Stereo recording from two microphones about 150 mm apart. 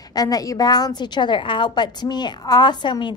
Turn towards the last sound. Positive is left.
turn(degrees=30)  # may be behind; listen again after turning